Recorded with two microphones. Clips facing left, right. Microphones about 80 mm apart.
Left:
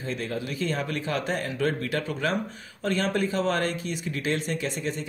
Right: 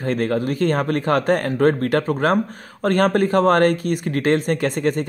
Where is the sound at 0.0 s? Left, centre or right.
Right.